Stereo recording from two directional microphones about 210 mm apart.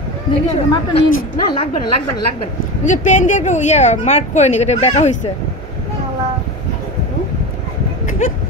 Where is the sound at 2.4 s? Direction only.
35° left (ahead or behind).